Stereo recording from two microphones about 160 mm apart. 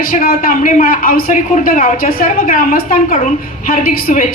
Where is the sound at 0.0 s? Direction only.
65° left (ahead or behind).